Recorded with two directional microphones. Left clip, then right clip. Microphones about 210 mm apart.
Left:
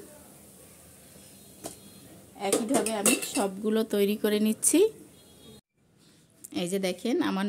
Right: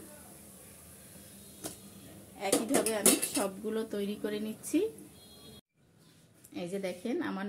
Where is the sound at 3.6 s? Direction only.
55° left (ahead or behind).